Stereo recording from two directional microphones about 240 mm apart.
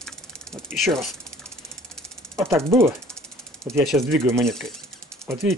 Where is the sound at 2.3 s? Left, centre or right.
Centre.